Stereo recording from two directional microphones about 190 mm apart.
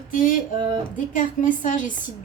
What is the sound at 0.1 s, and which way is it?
A woman's voice, 45° left (ahead or behind).